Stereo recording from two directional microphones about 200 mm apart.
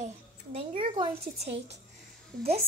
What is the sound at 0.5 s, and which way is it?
Speech, 30° right (ahead or behind).